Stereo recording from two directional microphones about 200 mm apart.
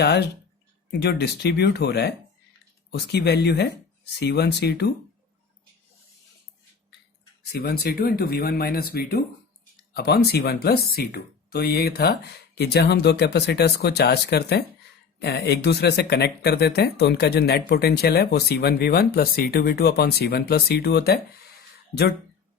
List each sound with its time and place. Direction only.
0.0 s speech: 55° left (ahead or behind)
7.5 s speech: 50° left (ahead or behind)